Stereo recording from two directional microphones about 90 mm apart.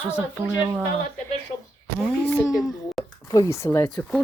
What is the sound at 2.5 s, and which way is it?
Speech, 5° right (ahead or behind).